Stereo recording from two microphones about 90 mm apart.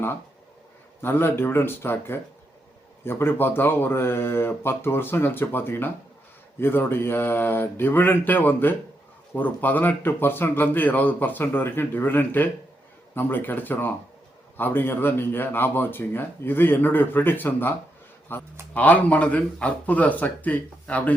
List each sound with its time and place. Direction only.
1.0 s speech: 25° left (ahead or behind)